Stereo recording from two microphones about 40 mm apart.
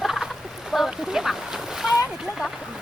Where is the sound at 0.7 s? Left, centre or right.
Centre.